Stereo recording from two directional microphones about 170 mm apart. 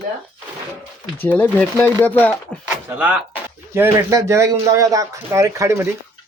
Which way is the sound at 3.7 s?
15° right (ahead or behind).